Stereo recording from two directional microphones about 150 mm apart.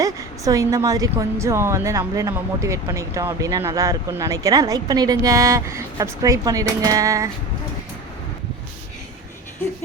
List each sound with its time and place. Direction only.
0.0 s a woman's voice: 20° right (ahead or behind)